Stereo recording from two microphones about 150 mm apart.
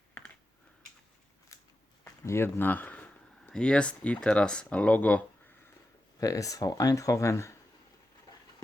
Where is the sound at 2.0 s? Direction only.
20° left (ahead or behind).